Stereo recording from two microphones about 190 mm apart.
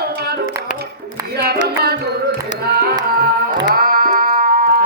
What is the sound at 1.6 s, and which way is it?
Carnatic music, 55° right (ahead or behind).